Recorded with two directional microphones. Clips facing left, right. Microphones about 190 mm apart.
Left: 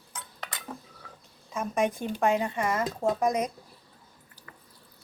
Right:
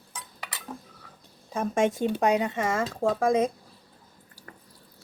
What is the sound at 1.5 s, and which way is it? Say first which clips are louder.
Speech: right 3 dB; 30° right (ahead or behind).